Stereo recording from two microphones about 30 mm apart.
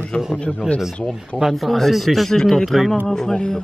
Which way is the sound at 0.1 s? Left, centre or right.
Left.